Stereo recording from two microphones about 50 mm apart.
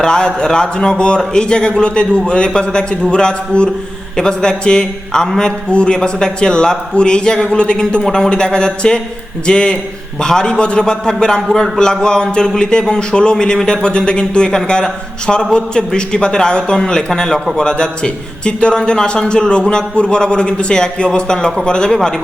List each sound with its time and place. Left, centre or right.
0.0 s a man's voice: centre